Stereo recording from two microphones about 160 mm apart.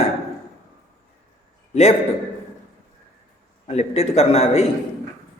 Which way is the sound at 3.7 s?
40° left (ahead or behind).